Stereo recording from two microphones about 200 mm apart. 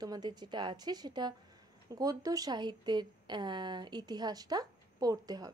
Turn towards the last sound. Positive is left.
turn(degrees=-20)  # may be behind; listen again after turning